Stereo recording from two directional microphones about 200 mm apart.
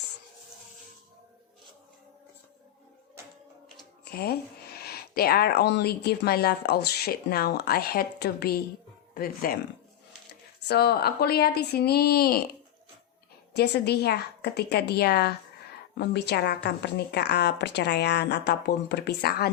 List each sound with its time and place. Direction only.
4.0 s speech: 50° left (ahead or behind)
10.7 s speech: 55° left (ahead or behind)
13.5 s a woman's voice: 55° left (ahead or behind)